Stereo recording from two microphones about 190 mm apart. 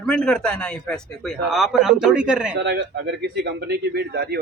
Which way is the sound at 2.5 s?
65° right (ahead or behind).